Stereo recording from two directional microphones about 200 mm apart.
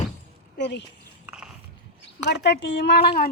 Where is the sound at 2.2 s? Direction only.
60° left (ahead or behind).